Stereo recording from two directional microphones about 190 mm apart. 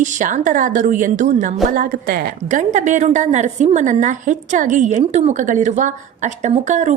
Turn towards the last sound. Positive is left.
turn(degrees=-40)  # may be behind; listen again after turning